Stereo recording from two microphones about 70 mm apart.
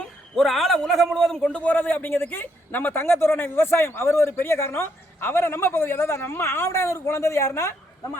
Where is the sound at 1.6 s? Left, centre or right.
Left.